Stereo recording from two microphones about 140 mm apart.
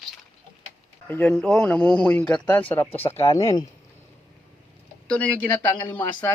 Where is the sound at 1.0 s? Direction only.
10° left (ahead or behind).